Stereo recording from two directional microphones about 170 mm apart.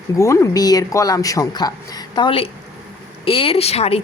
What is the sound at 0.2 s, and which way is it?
A woman's voice, 15° left (ahead or behind).